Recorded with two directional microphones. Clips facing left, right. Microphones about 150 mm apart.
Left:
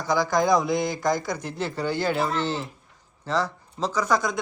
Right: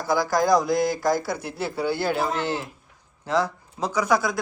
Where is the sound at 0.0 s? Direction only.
5° right (ahead or behind).